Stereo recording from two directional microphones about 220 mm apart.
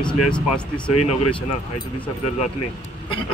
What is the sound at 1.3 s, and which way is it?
Speech, 20° left (ahead or behind).